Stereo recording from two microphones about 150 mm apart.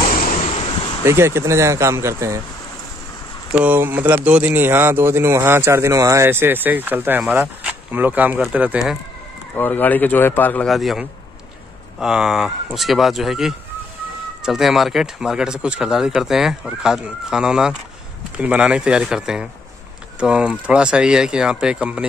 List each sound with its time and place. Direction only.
0.1 s a sound: 65° left (ahead or behind)
1.0 s speech: 15° right (ahead or behind)
3.5 s speech: 10° right (ahead or behind)
9.6 s speech: 10° left (ahead or behind)
10.7 s speech: centre (ahead or behind)